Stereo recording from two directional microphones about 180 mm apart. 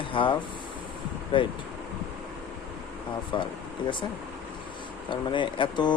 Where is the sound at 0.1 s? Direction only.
30° left (ahead or behind).